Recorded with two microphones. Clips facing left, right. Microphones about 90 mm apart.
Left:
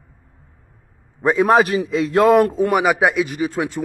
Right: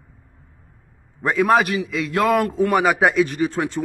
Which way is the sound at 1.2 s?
20° left (ahead or behind).